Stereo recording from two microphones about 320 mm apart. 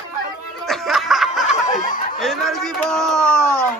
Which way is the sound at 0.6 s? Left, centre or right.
Centre.